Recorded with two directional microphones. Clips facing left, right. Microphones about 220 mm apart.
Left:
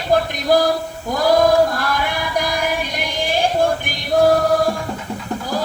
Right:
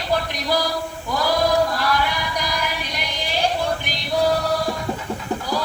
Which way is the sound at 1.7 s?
50° left (ahead or behind).